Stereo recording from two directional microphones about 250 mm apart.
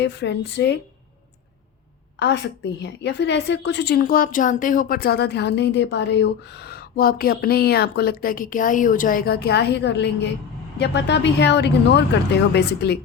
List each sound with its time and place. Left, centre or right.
0.0 s speech: left
2.1 s a woman's voice: left